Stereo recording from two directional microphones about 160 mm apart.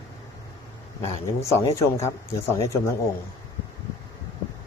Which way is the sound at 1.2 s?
20° left (ahead or behind).